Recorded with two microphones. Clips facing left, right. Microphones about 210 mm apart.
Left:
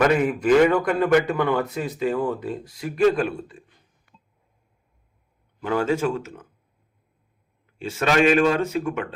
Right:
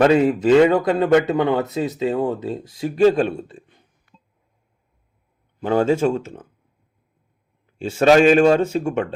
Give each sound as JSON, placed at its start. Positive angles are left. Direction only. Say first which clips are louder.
{"t": 0.0, "sound": "speech", "louder": "right 5 dB", "side_deg": -25}
{"t": 5.5, "sound": "speech", "louder": "right 5 dB", "side_deg": -30}
{"t": 7.9, "sound": "speech", "louder": "right 6 dB", "side_deg": -30}